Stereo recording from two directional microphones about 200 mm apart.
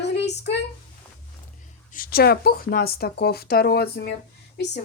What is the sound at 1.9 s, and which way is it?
A woman's voice, 45° left (ahead or behind).